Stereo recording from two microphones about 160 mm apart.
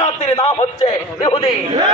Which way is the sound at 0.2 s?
35° left (ahead or behind).